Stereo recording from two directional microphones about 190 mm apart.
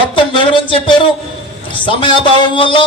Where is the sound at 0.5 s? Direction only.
25° left (ahead or behind).